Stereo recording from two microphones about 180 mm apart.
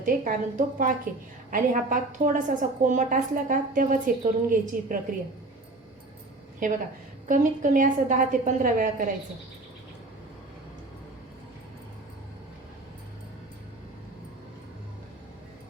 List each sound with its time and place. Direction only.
0.0 s a woman's voice: 50° right (ahead or behind)
6.6 s a woman's voice: 45° right (ahead or behind)